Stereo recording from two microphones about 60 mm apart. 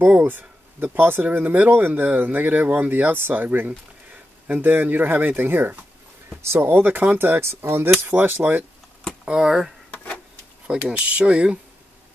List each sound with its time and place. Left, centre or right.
0.0 s speech: right
6.4 s speech: right
6.7 s speech: right
9.2 s speech: centre
10.7 s speech: centre